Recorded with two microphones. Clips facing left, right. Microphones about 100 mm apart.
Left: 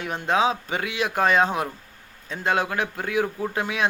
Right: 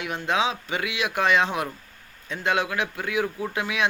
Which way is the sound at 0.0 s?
40° left (ahead or behind).